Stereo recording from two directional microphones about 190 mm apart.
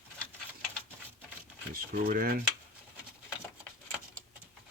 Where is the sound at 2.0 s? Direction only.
50° right (ahead or behind).